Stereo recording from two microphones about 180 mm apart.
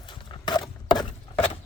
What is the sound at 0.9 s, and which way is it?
Chopping, 25° left (ahead or behind).